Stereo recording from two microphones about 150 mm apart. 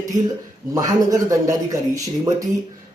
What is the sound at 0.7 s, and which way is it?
Speech, 25° right (ahead or behind).